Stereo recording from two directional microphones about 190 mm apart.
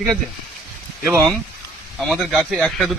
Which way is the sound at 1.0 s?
15° right (ahead or behind).